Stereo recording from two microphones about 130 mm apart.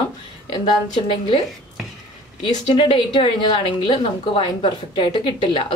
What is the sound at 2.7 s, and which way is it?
Speech, 40° left (ahead or behind).